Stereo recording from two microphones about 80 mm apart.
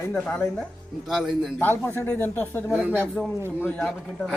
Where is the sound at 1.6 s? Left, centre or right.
Left.